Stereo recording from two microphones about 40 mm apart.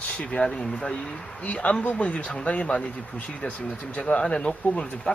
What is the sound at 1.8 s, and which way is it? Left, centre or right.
Speech, left.